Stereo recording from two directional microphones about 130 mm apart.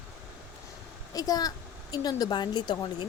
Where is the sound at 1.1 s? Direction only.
30° left (ahead or behind).